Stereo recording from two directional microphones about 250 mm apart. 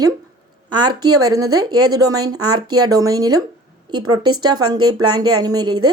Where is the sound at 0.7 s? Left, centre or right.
Centre.